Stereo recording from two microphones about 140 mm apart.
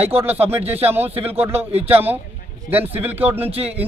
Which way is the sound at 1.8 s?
15° right (ahead or behind).